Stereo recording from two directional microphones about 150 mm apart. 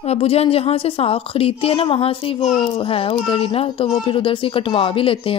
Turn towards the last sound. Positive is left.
turn(degrees=35)  # may be behind; listen again after turning